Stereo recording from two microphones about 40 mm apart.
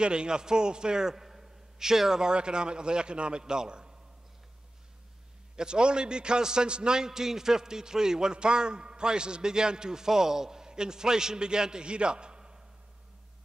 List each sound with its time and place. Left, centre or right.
0.0 s a man's voice: right
5.6 s a man's voice: right